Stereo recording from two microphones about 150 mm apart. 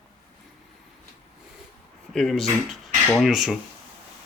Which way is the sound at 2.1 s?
Centre (ahead or behind).